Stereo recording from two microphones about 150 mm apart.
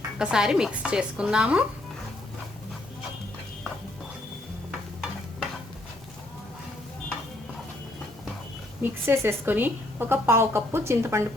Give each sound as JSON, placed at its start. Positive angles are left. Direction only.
{"t": 0.2, "sound": "speech", "side_deg": -5}
{"t": 8.8, "sound": "a woman's voice", "side_deg": -15}